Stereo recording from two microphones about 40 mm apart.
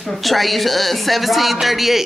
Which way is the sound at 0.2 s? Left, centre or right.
Centre.